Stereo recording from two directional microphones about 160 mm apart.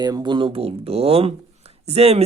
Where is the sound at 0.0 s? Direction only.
25° right (ahead or behind).